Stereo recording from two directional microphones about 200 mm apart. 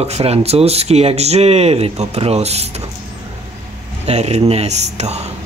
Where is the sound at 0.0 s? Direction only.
30° right (ahead or behind).